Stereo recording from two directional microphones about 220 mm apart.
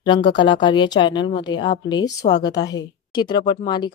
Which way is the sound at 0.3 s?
20° left (ahead or behind).